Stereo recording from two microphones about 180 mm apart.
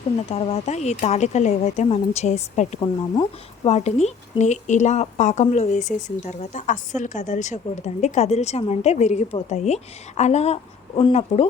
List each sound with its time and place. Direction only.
0.2 s speech: 35° left (ahead or behind)
2.8 s speech: 25° left (ahead or behind)